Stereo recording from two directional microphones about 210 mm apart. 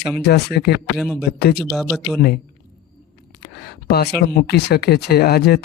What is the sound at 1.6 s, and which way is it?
Speech, centre (ahead or behind).